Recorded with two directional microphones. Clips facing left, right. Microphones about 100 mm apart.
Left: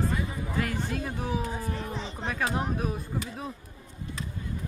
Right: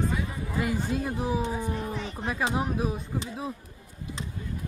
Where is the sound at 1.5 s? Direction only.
5° right (ahead or behind).